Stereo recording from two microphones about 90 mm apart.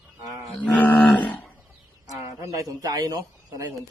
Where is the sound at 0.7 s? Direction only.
15° left (ahead or behind).